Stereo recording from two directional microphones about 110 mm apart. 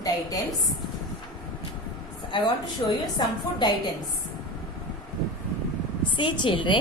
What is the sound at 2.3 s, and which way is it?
A woman's voice, 45° left (ahead or behind).